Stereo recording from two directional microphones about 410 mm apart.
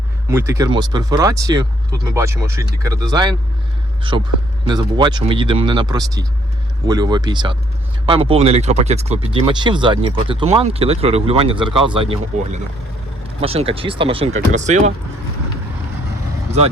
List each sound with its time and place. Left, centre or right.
0.3 s speech: centre
13.4 s speech: centre
16.5 s speech: centre